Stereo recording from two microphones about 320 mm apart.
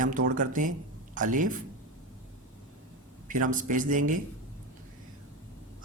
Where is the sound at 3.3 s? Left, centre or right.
Right.